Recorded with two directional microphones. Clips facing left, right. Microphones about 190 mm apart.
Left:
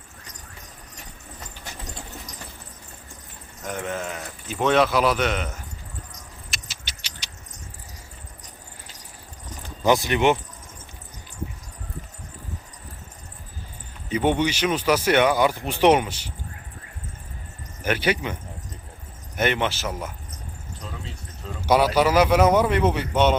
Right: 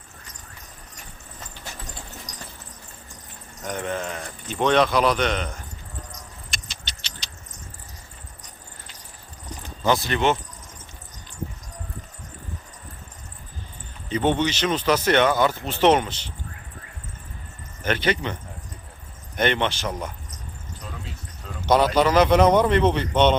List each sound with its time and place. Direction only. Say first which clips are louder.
3.7 s speech: right 1 dB; 5° left (ahead or behind)
6.5 s a sound: right 1 dB; 5° left (ahead or behind)
9.8 s speech: left 2 dB; 15° left (ahead or behind)
14.1 s speech: even; 10° left (ahead or behind)
17.8 s speech: even; 10° left (ahead or behind)
19.4 s speech: right 1 dB; 5° left (ahead or behind)
21.7 s speech: even; 10° left (ahead or behind)